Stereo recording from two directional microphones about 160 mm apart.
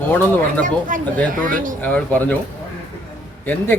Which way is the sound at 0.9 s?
55° right (ahead or behind).